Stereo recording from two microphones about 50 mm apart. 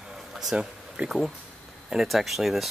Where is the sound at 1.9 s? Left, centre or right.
Centre.